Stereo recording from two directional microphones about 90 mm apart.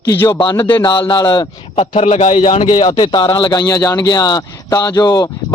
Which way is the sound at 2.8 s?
65° left (ahead or behind).